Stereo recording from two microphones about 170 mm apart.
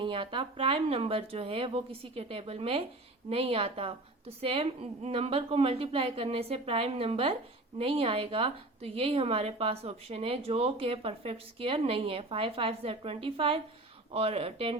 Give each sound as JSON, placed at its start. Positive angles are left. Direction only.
{"t": 0.0, "sound": "a woman's voice", "side_deg": -30}